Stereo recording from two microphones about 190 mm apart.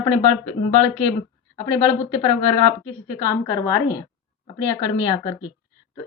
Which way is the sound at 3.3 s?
15° left (ahead or behind).